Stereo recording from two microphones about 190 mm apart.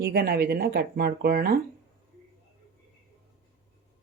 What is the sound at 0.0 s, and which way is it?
Speech, 55° right (ahead or behind).